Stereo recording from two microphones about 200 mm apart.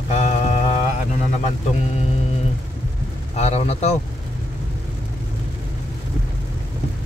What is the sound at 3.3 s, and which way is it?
Speech, 30° left (ahead or behind).